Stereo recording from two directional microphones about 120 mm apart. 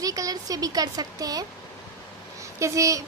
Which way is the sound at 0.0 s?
30° right (ahead or behind).